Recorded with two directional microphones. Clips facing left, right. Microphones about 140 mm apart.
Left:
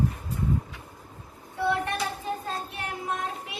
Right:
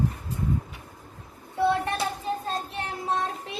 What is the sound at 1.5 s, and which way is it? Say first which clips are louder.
Child singing: right 3 dB; 20° right (ahead or behind).